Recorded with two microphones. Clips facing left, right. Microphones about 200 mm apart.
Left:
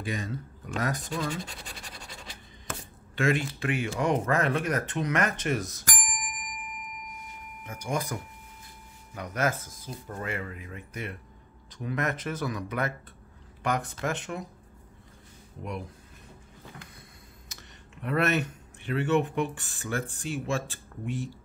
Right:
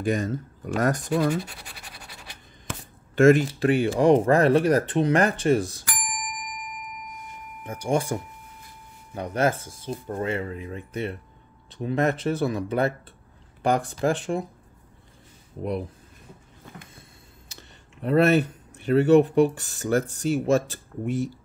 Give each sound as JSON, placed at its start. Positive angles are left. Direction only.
{"t": 0.0, "sound": "speech", "side_deg": -45}
{"t": 3.2, "sound": "speech", "side_deg": -45}
{"t": 7.6, "sound": "speech", "side_deg": -30}
{"t": 17.5, "sound": "speech", "side_deg": -30}